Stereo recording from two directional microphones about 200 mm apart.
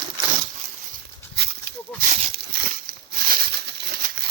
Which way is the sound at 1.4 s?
55° right (ahead or behind).